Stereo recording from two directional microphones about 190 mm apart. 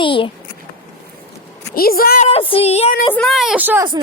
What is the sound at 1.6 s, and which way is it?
Speech, 50° left (ahead or behind).